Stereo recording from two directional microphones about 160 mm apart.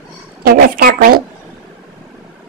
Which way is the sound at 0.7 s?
70° right (ahead or behind).